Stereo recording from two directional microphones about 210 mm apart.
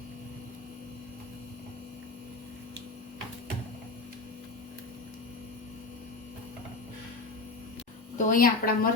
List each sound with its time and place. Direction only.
8.2 s a woman's voice: 40° left (ahead or behind)